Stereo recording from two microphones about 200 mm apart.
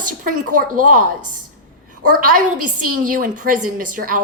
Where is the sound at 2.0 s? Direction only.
45° right (ahead or behind).